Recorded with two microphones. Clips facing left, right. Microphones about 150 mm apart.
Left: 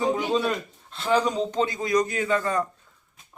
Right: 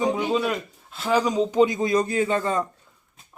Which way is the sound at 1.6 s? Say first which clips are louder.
Right 2 dB; 20° right (ahead or behind).